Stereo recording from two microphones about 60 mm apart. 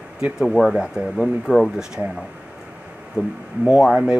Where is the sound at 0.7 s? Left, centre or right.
Centre.